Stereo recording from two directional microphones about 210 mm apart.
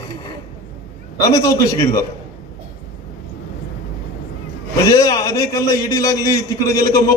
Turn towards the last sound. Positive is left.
turn(degrees=15)  # may be behind; listen again after turning